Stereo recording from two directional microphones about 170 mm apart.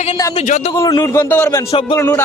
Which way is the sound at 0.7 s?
20° left (ahead or behind).